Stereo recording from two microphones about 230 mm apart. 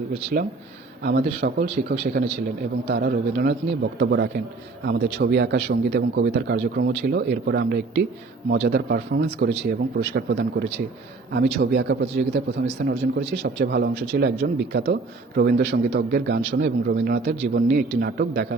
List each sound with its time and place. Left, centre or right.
0.3 s a man's voice: right